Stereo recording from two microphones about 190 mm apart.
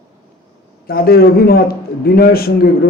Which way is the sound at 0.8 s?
50° left (ahead or behind).